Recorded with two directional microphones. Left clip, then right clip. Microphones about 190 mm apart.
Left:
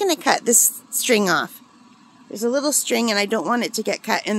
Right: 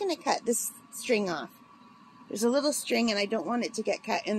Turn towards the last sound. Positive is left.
turn(degrees=45)  # may be behind; listen again after turning